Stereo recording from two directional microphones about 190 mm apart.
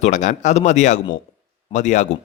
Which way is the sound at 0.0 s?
40° left (ahead or behind).